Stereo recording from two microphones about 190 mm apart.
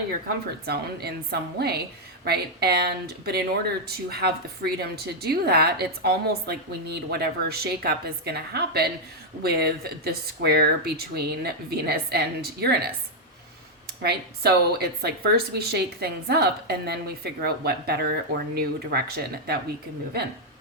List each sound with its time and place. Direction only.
0.6 s a woman's voice: 55° right (ahead or behind)
14.0 s a woman's voice: 55° right (ahead or behind)